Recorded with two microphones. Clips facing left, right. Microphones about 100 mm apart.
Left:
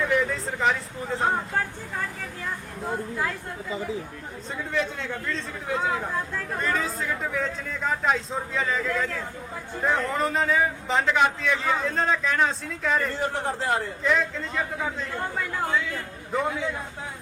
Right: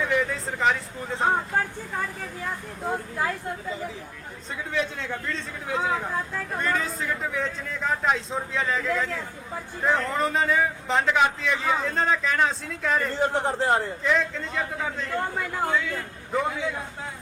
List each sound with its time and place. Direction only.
0.0 s a man's voice: centre (ahead or behind)
2.9 s a man's voice: 20° right (ahead or behind)
4.7 s a man's voice: centre (ahead or behind)
13.2 s a man's voice: 25° right (ahead or behind)
14.0 s a man's voice: centre (ahead or behind)